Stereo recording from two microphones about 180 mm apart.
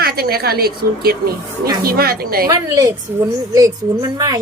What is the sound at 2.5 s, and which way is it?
A woman's voice, 20° right (ahead or behind).